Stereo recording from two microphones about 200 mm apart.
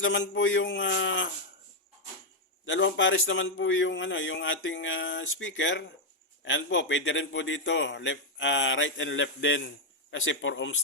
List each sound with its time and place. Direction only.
0.0 s a man's voice: 70° left (ahead or behind)
2.6 s a man's voice: 70° left (ahead or behind)